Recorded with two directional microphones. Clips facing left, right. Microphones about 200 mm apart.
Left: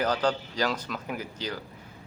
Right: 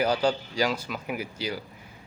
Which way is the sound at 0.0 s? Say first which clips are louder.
Right 2 dB; 10° right (ahead or behind).